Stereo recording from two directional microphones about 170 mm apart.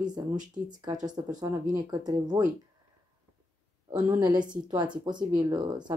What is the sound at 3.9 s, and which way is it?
Speech, 20° right (ahead or behind).